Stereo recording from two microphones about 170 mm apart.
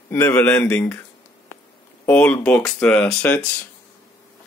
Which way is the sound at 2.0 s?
10° left (ahead or behind).